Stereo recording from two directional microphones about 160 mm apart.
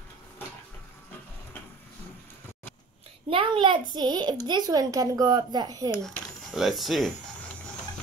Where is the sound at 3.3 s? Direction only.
35° right (ahead or behind).